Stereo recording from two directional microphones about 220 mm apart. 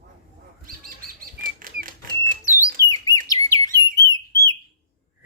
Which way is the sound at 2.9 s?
15° left (ahead or behind).